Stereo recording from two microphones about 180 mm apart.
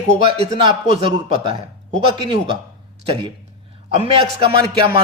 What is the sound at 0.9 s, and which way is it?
Speech, 30° right (ahead or behind).